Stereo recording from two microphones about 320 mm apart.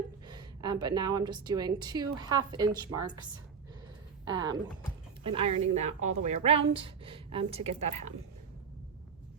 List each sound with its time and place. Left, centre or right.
0.3 s a woman's voice: centre
4.3 s a woman's voice: centre